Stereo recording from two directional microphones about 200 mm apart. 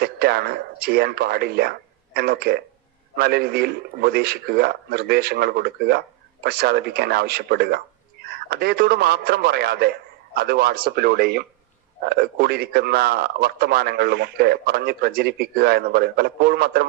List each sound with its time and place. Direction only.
0.0 s a man's voice: 50° right (ahead or behind)